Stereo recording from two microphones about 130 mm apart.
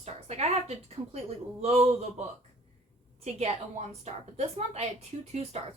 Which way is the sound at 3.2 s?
55° right (ahead or behind).